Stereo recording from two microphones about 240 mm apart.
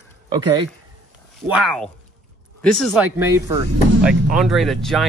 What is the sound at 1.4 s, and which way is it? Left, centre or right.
Speech, centre.